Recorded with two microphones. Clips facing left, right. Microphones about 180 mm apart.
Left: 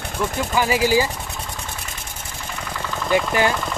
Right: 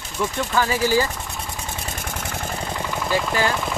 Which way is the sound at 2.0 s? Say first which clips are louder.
Right 6 dB; 65° right (ahead or behind).